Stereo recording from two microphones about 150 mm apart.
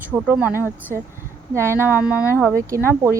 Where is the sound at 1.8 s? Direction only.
10° right (ahead or behind).